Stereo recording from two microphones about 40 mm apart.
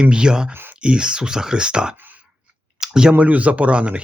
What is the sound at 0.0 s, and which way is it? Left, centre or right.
Speech, right.